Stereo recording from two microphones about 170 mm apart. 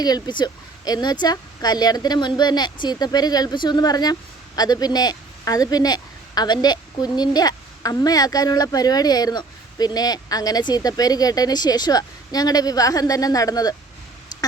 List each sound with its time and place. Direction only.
0.0 s speech: 25° left (ahead or behind)